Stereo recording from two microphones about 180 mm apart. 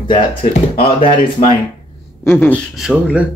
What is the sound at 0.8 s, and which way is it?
Speech, 30° left (ahead or behind).